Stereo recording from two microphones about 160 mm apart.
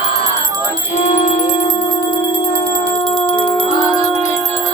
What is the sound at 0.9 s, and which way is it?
Music, 50° left (ahead or behind).